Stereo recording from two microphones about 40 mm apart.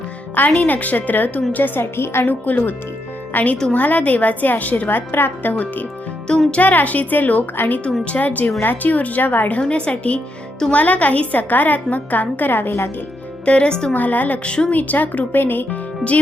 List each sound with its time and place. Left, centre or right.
0.3 s a woman's voice: left
1.5 s a woman's voice: left
2.2 s a woman's voice: left
7.5 s a woman's voice: left
8.2 s a woman's voice: left
9.5 s a woman's voice: left
13.4 s speech: left
13.9 s a woman's voice: left
14.4 s speech: left
14.7 s a woman's voice: left
15.3 s a woman's voice: left